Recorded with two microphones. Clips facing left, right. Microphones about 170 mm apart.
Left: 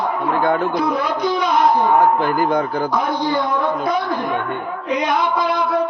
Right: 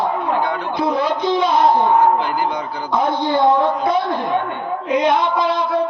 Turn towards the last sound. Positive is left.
turn(degrees=-25)  # may be behind; listen again after turning